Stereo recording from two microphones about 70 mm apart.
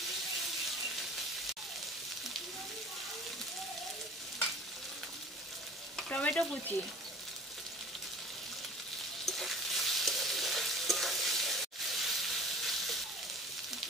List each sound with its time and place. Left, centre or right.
6.0 s stir: centre
9.2 s stir: centre
12.0 s steam: centre